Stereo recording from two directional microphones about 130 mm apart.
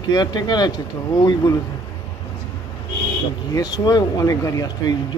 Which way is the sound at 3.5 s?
30° left (ahead or behind).